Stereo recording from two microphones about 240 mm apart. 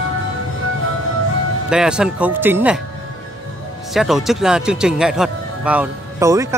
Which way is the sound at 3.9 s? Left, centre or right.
Centre.